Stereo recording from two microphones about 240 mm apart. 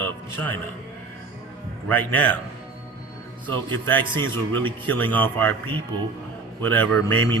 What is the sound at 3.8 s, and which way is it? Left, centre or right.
A man's voice, centre.